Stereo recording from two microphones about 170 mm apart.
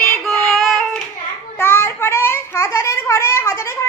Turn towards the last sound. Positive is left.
turn(degrees=15)  # may be behind; listen again after turning